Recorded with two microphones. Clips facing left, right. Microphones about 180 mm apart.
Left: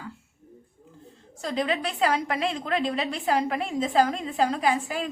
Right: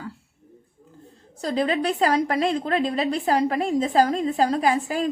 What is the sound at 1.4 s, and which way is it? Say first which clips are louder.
A woman's voice: right 4 dB; 40° right (ahead or behind).